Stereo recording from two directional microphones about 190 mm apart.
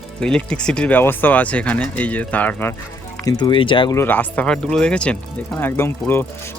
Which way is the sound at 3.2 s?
20° left (ahead or behind).